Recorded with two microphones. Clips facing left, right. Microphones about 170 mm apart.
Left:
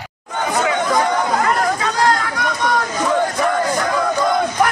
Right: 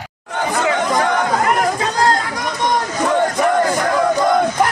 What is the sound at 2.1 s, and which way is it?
Chatter, 30° right (ahead or behind).